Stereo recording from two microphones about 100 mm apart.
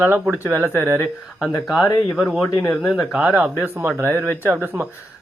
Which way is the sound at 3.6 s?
20° right (ahead or behind).